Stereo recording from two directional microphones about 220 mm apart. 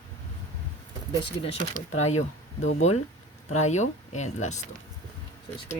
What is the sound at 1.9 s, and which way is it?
Speech, 30° left (ahead or behind).